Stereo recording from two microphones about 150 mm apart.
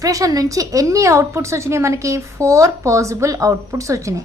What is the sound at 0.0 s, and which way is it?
A woman's voice, 20° right (ahead or behind).